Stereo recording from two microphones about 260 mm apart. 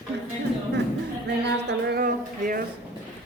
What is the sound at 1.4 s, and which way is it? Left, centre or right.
A woman's voice, right.